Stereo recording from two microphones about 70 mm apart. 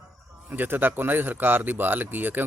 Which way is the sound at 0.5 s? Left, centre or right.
Right.